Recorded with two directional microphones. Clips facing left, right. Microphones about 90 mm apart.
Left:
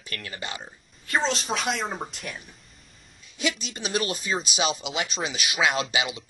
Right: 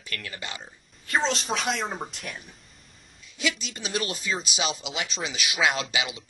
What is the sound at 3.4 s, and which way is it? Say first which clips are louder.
Speech: left 1 dB; 20° left (ahead or behind).